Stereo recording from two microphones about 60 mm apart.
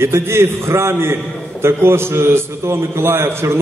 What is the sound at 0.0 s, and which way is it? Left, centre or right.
A man's voice, right.